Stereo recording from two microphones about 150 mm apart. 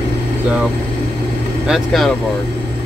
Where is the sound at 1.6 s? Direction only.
Centre (ahead or behind).